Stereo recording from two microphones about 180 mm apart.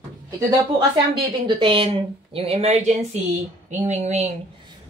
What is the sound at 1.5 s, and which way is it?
Speech, 30° right (ahead or behind).